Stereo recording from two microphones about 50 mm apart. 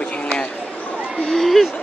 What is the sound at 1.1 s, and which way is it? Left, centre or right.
Speech, centre.